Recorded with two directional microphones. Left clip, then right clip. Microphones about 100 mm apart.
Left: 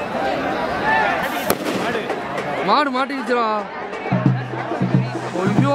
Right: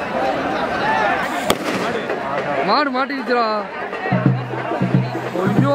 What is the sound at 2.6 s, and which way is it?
Speech, 5° left (ahead or behind).